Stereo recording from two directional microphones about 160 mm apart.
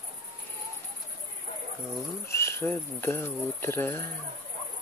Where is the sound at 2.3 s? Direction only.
15° left (ahead or behind).